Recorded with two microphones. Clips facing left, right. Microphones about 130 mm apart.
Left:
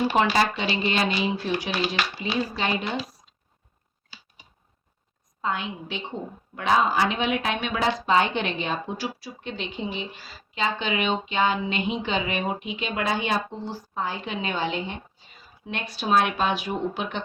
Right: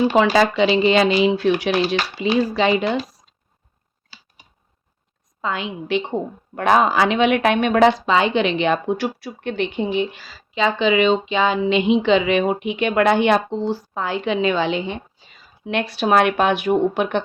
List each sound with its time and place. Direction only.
0.5 s a woman's voice: 90° right
1.2 s speech: 75° right (ahead or behind)
2.2 s a woman's voice: 90° right
5.4 s a woman's voice: 90° right
6.6 s speech: 60° right (ahead or behind); by 14.9 s 90° right
15.6 s speech: 70° right (ahead or behind)